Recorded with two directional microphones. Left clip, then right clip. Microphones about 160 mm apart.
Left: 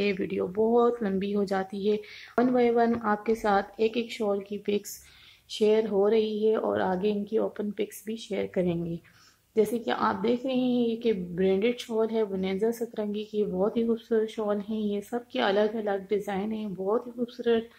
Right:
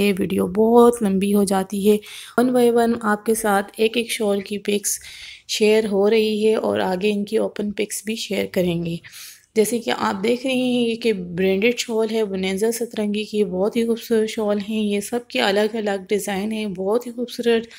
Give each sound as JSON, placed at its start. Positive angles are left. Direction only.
{"t": 0.0, "sound": "speech", "side_deg": -50}
{"t": 3.5, "sound": "a woman's voice", "side_deg": -20}